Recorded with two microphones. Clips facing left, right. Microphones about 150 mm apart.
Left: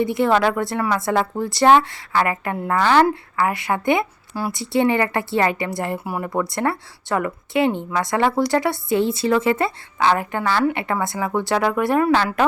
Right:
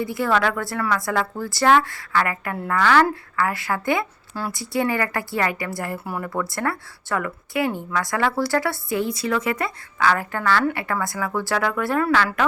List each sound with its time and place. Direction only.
0.0 s a woman's voice: 20° left (ahead or behind)